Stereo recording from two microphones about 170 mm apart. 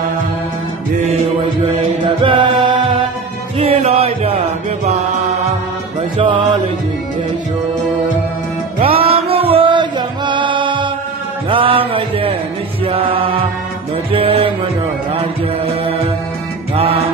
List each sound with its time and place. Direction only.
2.2 s music: 30° right (ahead or behind)
6.1 s music: 30° right (ahead or behind)
9.0 s music: 35° right (ahead or behind)
12.8 s chant: 30° right (ahead or behind)
14.1 s music: 35° right (ahead or behind)